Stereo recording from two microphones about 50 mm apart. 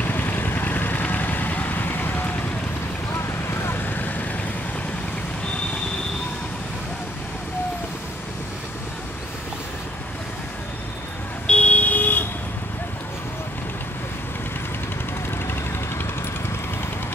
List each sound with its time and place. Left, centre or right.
0.0 s vehicle: left
3.4 s vehicle: left
11.4 s a sound: left